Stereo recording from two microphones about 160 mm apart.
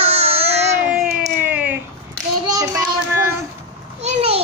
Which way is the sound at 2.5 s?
20° right (ahead or behind).